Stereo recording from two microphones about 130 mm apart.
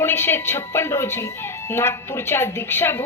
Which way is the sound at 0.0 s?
15° left (ahead or behind).